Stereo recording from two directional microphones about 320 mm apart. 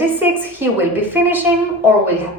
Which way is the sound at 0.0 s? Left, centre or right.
Centre.